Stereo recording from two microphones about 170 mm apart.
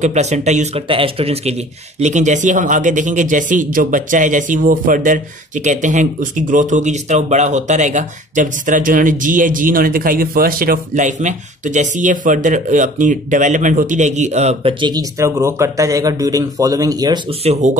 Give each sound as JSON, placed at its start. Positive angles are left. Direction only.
{"t": 0.0, "sound": "speech", "side_deg": -40}
{"t": 17.5, "sound": "speech", "side_deg": -45}